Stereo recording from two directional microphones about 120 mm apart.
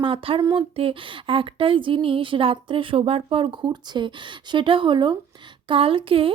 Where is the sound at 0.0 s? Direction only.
50° right (ahead or behind).